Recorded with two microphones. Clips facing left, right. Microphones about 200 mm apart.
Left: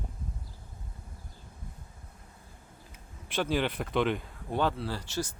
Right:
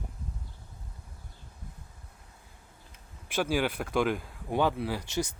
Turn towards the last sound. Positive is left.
turn(degrees=-20)  # may be behind; listen again after turning